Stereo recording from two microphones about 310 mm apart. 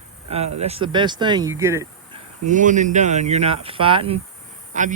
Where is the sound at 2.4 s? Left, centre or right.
Right.